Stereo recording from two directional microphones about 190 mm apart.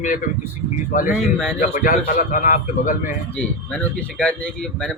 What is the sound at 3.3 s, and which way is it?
Speech, 5° left (ahead or behind).